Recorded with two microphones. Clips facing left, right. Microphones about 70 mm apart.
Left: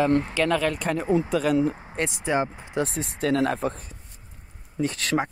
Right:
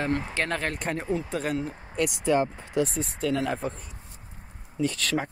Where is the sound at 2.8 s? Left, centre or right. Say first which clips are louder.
Left 2 dB; left.